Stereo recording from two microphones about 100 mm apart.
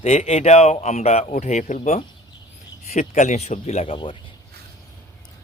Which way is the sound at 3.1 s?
90° left.